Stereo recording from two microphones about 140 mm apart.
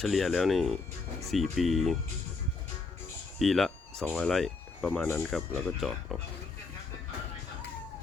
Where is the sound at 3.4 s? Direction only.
Centre (ahead or behind).